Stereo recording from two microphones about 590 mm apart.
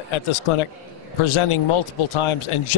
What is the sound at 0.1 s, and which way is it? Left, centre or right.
A man's voice, left.